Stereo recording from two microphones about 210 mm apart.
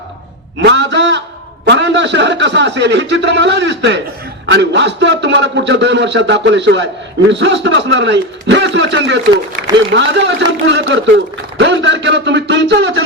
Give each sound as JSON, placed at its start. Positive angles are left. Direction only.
{"t": 0.6, "sound": "a man's voice", "side_deg": -55}